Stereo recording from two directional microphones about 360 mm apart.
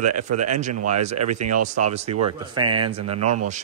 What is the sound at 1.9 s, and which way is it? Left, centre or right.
Speech, centre.